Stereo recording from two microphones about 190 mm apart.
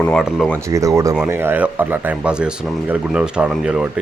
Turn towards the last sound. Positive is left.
turn(degrees=-5)  # may be behind; listen again after turning